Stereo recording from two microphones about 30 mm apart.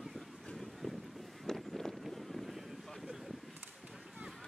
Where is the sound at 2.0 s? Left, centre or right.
Centre.